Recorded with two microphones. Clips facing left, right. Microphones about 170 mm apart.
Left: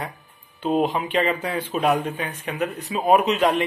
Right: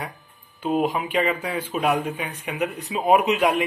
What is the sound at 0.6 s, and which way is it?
A man's voice, 5° right (ahead or behind).